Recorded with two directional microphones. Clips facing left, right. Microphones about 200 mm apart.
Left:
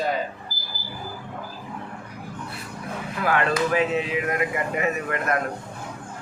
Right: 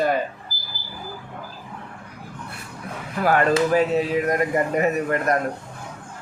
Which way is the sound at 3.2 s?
40° right (ahead or behind).